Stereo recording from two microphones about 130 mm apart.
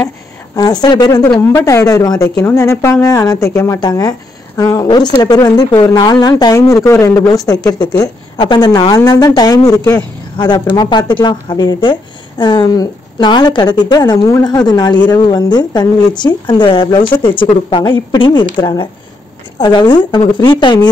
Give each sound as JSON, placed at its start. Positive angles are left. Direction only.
{"t": 0.6, "sound": "a woman's voice", "side_deg": 30}